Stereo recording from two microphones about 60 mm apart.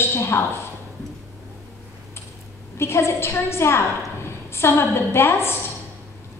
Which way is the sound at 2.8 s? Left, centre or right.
Left.